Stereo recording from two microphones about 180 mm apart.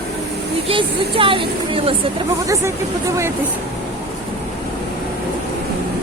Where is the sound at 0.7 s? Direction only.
30° right (ahead or behind).